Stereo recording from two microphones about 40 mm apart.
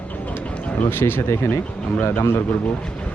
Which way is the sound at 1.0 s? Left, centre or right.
Left.